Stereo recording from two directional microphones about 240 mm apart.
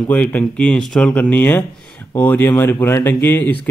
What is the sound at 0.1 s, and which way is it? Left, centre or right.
A man's voice, centre.